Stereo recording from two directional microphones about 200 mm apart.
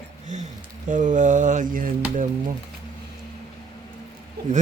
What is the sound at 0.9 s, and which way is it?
Speech, 40° right (ahead or behind).